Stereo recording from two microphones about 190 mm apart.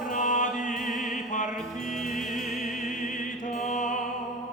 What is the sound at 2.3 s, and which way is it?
Music, centre (ahead or behind).